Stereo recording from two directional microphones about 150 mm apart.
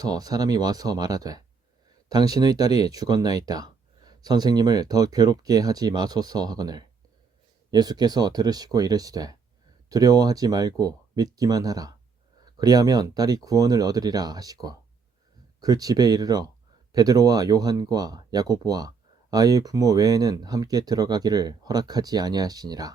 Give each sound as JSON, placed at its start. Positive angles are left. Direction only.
{"t": 0.0, "sound": "speech", "side_deg": -25}